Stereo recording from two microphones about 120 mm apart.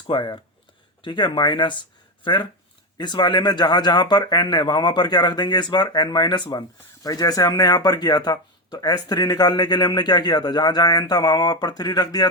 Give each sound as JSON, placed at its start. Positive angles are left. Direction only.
{"t": 0.1, "sound": "a man's voice", "side_deg": 40}